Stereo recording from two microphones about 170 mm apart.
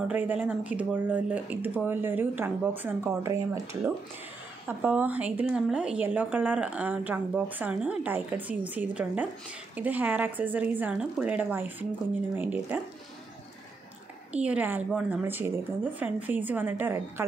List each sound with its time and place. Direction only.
0.1 s a woman's voice: 10° right (ahead or behind)
14.3 s a woman's voice: 10° right (ahead or behind)